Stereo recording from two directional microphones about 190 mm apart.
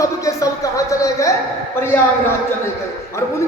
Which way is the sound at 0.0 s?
15° left (ahead or behind).